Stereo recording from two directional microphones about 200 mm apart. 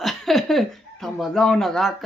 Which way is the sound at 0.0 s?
Centre (ahead or behind).